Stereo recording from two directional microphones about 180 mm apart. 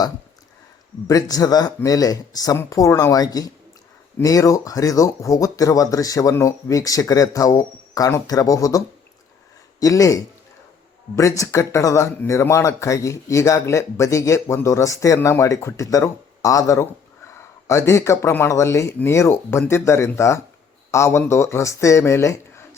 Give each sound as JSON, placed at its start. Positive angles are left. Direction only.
{"t": 1.0, "sound": "speech", "side_deg": 20}
{"t": 9.8, "sound": "speech", "side_deg": 20}